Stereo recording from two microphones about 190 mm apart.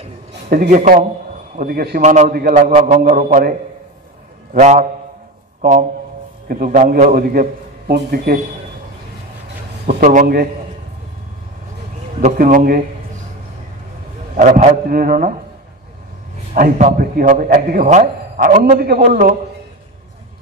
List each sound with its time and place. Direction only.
0.5 s a man's voice: 50° right (ahead or behind)
2.0 s a man's voice: 40° right (ahead or behind)
4.6 s a man's voice: 40° right (ahead or behind); by 8.4 s 55° right (ahead or behind)
9.9 s a man's voice: 45° right (ahead or behind)
12.2 s a man's voice: 45° right (ahead or behind)
14.7 s a man's voice: 50° right (ahead or behind)
16.5 s a man's voice: 45° right (ahead or behind)